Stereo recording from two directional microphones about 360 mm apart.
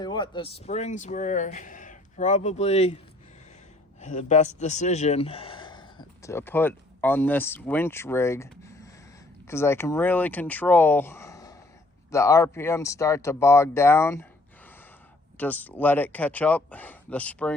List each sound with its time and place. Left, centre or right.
0.0 s speech: centre
4.0 s speech: centre
15.4 s speech: centre